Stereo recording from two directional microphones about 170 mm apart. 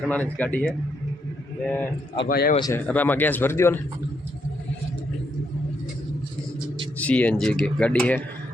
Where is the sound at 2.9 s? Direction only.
10° left (ahead or behind).